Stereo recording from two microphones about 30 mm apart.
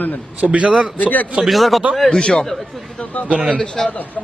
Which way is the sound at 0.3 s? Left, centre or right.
Right.